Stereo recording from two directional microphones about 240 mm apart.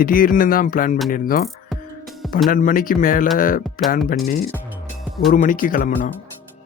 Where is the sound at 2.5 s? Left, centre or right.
Left.